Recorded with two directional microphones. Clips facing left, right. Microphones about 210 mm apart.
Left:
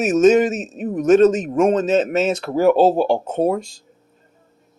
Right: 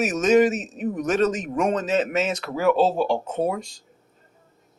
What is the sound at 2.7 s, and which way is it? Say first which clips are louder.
Speech: left 4 dB; 50° left (ahead or behind).